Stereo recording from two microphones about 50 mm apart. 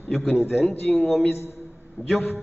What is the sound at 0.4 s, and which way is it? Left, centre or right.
A man's voice, left.